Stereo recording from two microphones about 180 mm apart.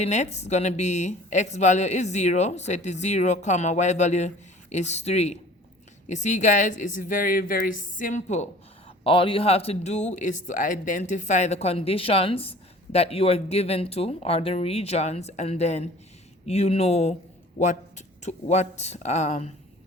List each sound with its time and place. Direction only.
0.0 s speech: 40° left (ahead or behind)
9.0 s speech: 30° left (ahead or behind)